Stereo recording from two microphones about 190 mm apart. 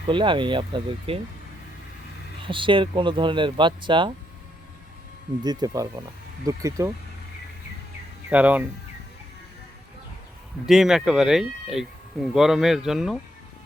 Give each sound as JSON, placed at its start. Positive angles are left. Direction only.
{"t": 0.1, "sound": "speech", "side_deg": -25}
{"t": 2.4, "sound": "speech", "side_deg": -25}
{"t": 5.4, "sound": "speech", "side_deg": -20}
{"t": 8.3, "sound": "speech", "side_deg": -5}
{"t": 10.7, "sound": "speech", "side_deg": 0}